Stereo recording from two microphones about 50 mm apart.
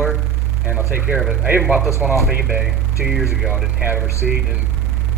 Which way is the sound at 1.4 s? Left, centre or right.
Right.